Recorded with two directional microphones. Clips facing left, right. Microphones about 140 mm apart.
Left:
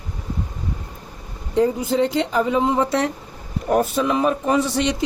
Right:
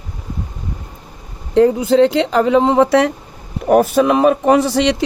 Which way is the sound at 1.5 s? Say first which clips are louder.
Right 7 dB; 70° right (ahead or behind).